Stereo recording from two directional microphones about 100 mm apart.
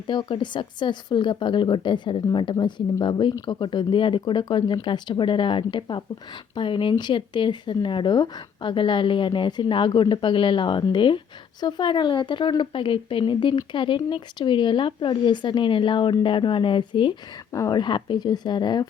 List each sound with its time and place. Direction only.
0.1 s a woman's voice: 50° left (ahead or behind)
17.5 s speech: 40° left (ahead or behind)